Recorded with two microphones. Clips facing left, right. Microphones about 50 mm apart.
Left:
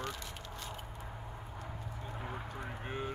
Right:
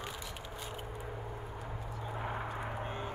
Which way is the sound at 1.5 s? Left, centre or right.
Centre.